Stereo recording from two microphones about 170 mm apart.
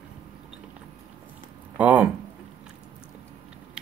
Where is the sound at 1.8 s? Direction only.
10° right (ahead or behind).